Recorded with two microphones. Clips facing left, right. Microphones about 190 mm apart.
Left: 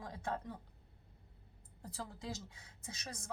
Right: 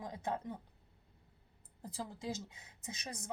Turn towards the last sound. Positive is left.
turn(degrees=-15)  # may be behind; listen again after turning